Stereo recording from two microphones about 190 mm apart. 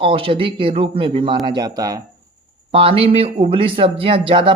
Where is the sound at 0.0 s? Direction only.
30° right (ahead or behind).